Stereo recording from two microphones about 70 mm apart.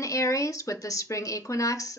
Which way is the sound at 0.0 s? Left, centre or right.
Left.